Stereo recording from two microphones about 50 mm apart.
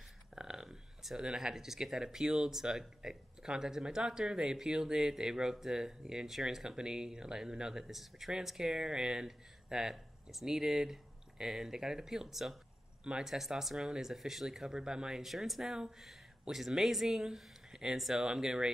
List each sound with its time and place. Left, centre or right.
0.4 s speech: centre